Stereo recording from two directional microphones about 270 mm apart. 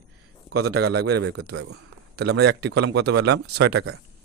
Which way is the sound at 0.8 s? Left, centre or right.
Right.